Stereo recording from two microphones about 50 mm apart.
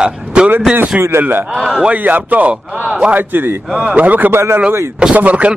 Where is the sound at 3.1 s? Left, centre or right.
Right.